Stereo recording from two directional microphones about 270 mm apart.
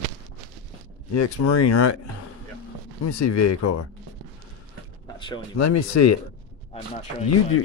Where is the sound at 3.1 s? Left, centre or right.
Left.